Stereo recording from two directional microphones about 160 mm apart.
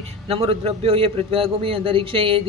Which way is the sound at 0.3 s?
40° right (ahead or behind).